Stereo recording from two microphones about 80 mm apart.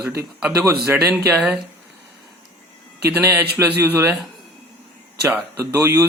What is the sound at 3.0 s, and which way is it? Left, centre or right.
Speech, right.